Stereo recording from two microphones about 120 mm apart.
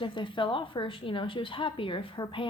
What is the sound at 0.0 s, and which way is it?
A woman's voice, 45° left (ahead or behind).